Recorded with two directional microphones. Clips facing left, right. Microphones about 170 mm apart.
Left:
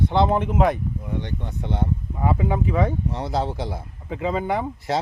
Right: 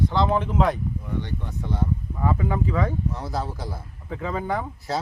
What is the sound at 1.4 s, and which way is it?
Speech, 25° left (ahead or behind).